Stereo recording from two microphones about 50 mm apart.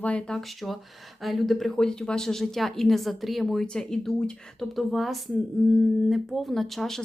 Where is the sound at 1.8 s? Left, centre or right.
Centre.